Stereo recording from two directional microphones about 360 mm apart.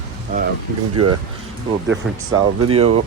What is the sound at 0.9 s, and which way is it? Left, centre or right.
Speech, right.